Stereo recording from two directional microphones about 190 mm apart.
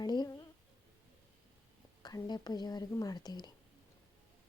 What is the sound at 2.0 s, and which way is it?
Speech, 20° left (ahead or behind).